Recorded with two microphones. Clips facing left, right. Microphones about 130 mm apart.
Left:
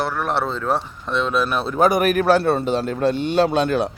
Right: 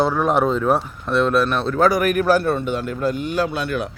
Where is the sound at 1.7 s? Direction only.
20° left (ahead or behind).